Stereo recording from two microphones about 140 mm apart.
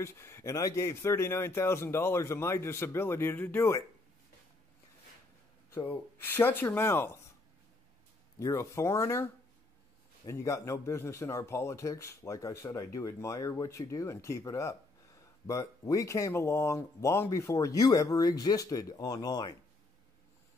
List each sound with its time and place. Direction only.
0.0 s speech: 20° left (ahead or behind)
5.9 s speech: 15° left (ahead or behind)
8.4 s speech: 20° left (ahead or behind)